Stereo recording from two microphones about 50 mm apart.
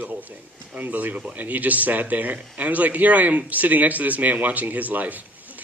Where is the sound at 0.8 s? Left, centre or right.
Right.